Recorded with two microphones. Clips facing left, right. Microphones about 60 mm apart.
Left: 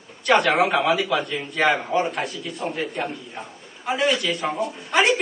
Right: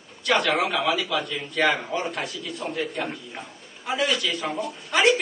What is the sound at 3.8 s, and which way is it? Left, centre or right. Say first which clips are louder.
A man's voice: left 3 dB; centre.